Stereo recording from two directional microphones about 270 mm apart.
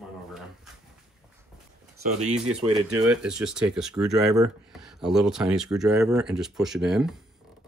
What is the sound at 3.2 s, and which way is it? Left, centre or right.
Speech, centre.